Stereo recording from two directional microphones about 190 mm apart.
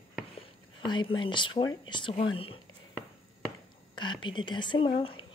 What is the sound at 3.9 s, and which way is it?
Speech, 25° left (ahead or behind).